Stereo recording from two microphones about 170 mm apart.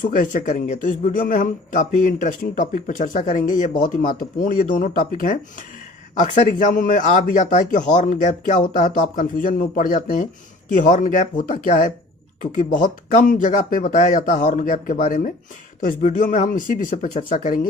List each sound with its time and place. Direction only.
0.0 s speech: 50° left (ahead or behind)